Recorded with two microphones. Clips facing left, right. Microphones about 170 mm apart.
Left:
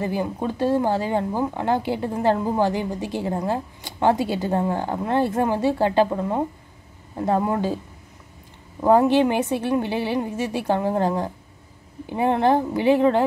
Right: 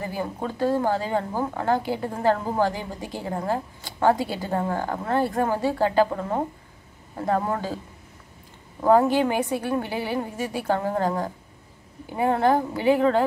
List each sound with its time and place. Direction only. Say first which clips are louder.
0.0 s a woman's voice: left 4 dB; 20° left (ahead or behind)
8.8 s a woman's voice: left 2 dB; 20° left (ahead or behind)